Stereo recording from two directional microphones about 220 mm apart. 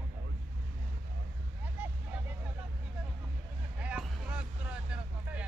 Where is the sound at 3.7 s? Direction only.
5° right (ahead or behind).